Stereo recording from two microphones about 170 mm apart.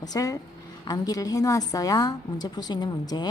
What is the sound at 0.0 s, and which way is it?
A woman's voice, 20° left (ahead or behind).